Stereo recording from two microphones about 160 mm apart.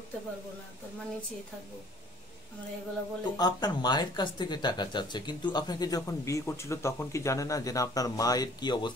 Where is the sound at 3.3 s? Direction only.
25° left (ahead or behind).